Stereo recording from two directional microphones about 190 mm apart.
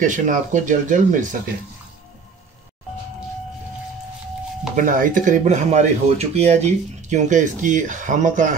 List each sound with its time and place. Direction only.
0.0 s speech: 40° right (ahead or behind)
4.7 s speech: 45° right (ahead or behind)